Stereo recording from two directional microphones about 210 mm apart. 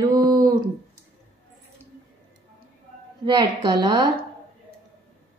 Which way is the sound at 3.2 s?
20° right (ahead or behind).